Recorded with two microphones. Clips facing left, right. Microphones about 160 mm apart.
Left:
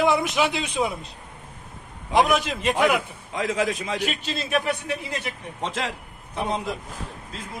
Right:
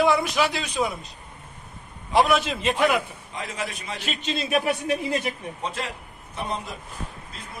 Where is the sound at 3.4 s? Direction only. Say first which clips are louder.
Left 8 dB; 90° left.